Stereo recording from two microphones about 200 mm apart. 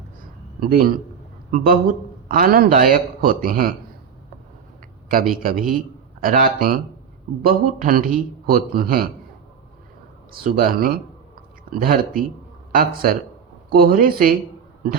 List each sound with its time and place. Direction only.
0.6 s a man's voice: 45° right (ahead or behind)
5.3 s speech: 45° right (ahead or behind)
10.4 s speech: 45° right (ahead or behind)